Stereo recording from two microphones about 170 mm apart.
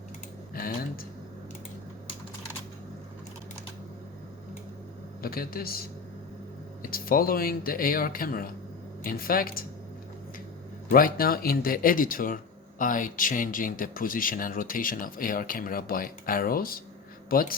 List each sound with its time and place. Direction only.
0.5 s a sound: 60° left (ahead or behind)
5.2 s speech: 60° left (ahead or behind)
6.8 s speech: 60° left (ahead or behind)
10.8 s speech: 55° left (ahead or behind)